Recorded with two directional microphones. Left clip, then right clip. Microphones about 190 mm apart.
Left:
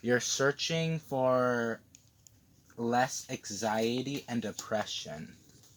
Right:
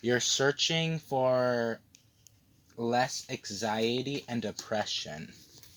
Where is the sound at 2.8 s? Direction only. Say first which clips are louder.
Right 1 dB; 30° right (ahead or behind).